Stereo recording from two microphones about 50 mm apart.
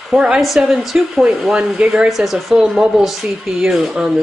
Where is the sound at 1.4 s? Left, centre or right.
Centre.